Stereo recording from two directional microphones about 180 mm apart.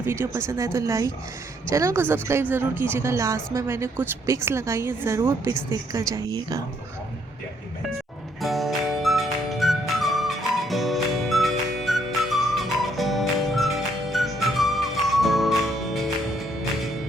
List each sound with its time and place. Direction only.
0.0 s a woman's voice: 15° right (ahead or behind)
8.4 s music: centre (ahead or behind)